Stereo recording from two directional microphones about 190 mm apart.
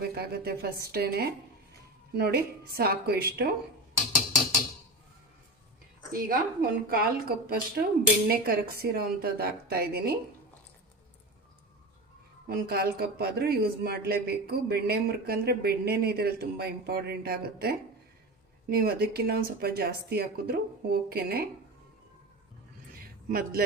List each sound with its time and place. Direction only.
0.0 s speech: 55° right (ahead or behind)
6.1 s a woman's voice: 50° right (ahead or behind)
12.5 s speech: 55° right (ahead or behind)
22.9 s a sound: 50° right (ahead or behind)